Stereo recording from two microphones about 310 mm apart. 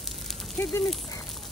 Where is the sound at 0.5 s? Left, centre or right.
Centre.